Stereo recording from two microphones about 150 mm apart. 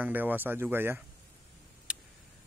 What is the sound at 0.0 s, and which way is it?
Speech, 10° right (ahead or behind).